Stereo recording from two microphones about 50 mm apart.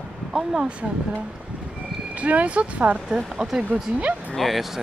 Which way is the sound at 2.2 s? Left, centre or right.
Right.